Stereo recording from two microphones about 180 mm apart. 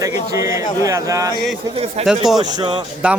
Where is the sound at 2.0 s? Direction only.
Centre (ahead or behind).